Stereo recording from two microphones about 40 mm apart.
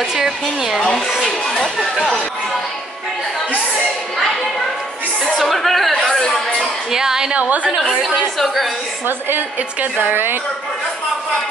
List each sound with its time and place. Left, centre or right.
0.1 s a woman's voice: centre
1.2 s speech: centre
5.3 s a sound: centre
6.9 s a woman's voice: centre
7.3 s a woman's voice: right
10.0 s a woman's voice: right